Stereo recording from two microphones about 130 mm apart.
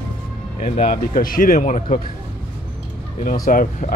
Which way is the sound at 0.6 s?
50° left (ahead or behind).